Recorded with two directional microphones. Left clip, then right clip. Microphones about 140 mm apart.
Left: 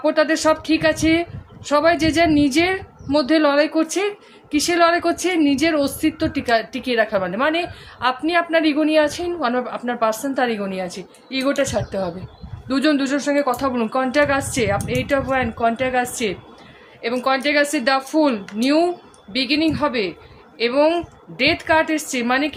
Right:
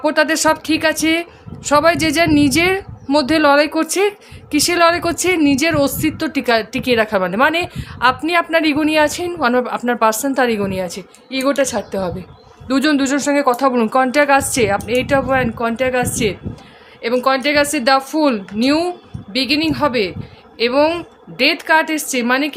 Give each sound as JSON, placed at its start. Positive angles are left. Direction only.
{"t": 0.0, "sound": "a woman's voice", "side_deg": -55}